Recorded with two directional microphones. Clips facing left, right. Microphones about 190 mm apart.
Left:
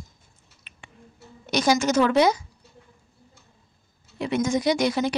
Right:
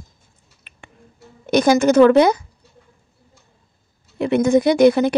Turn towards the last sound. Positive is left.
turn(degrees=-55)  # may be behind; listen again after turning